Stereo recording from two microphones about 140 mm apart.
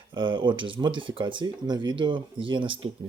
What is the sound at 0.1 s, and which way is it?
Speech, 35° right (ahead or behind).